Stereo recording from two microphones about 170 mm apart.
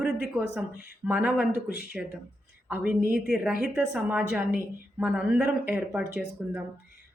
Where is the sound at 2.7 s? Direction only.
10° right (ahead or behind).